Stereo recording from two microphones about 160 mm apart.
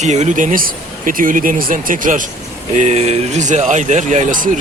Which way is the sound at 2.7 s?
45° right (ahead or behind).